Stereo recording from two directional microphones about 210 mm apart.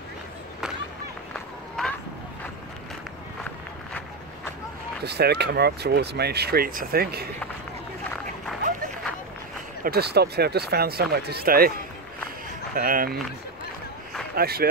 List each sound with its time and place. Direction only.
1.3 s run: 5° left (ahead or behind)
5.0 s speech: 50° right (ahead or behind)
9.8 s speech: 50° right (ahead or behind)
12.7 s speech: 45° right (ahead or behind)
14.3 s speech: 45° right (ahead or behind)